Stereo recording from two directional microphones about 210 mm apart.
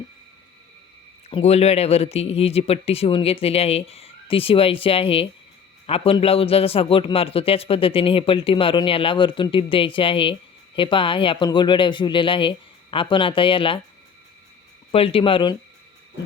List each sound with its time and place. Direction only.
1.3 s a man's voice: 30° left (ahead or behind)
14.9 s a man's voice: 25° left (ahead or behind)